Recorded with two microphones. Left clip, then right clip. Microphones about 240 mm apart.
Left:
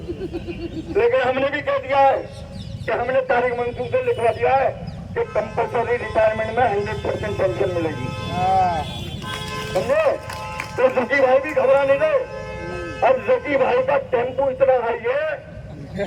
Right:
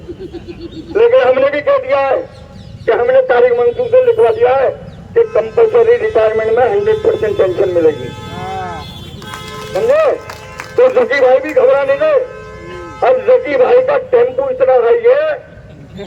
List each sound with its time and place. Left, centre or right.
0.9 s a sound: right
2.8 s speech: right
9.9 s speech: right